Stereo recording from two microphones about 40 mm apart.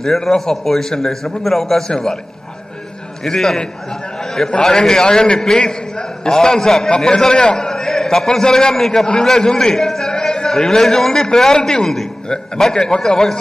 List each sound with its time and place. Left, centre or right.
0.0 s a man's voice: centre
3.3 s a man's voice: centre